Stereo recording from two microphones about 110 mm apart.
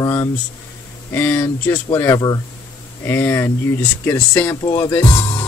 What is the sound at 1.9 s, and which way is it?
Speech, 25° left (ahead or behind).